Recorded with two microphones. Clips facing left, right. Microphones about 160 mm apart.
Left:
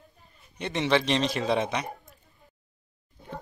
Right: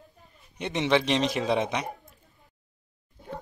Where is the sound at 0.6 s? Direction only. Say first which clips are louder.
Right 1 dB; 15° right (ahead or behind).